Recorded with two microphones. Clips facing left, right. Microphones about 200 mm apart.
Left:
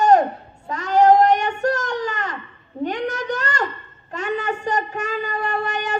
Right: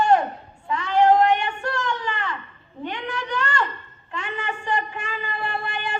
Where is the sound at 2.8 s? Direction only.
40° left (ahead or behind).